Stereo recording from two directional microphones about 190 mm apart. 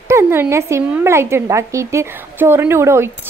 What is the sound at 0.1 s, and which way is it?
A woman's voice, 10° right (ahead or behind).